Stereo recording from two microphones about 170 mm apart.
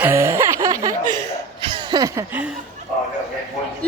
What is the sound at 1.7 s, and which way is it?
Chuckle, 25° right (ahead or behind).